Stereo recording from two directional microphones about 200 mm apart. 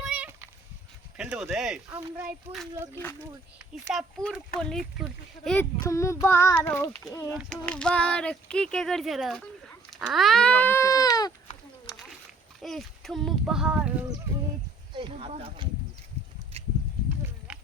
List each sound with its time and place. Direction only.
0.0 s a sound: 5° right (ahead or behind)
1.1 s speech: 5° right (ahead or behind)
1.9 s speech: 20° right (ahead or behind)
2.9 s child singing: 10° left (ahead or behind)
3.9 s speech: centre (ahead or behind)
5.7 s child singing: 15° left (ahead or behind)
7.3 s speech: centre (ahead or behind); by 11.3 s 20° left (ahead or behind)
12.5 s speech: centre (ahead or behind)
14.9 s speech: 25° right (ahead or behind)